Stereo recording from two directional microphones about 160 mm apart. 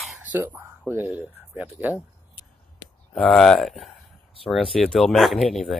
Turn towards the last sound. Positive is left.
turn(degrees=0)  # may be behind; listen again after turning